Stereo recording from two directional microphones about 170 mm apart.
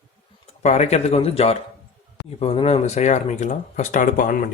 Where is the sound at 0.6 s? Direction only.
40° left (ahead or behind).